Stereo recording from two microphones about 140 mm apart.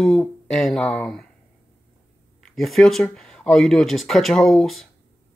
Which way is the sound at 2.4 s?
Centre (ahead or behind).